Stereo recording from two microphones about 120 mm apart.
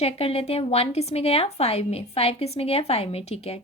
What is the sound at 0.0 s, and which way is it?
A woman's voice, 55° left (ahead or behind).